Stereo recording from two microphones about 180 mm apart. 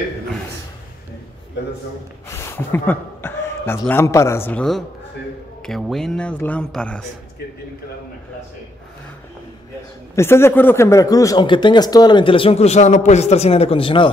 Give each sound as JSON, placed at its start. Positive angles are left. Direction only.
{"t": 2.2, "sound": "speech", "side_deg": 15}
{"t": 10.1, "sound": "speech", "side_deg": 15}